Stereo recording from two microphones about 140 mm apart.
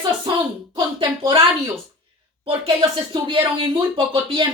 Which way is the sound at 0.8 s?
30° right (ahead or behind).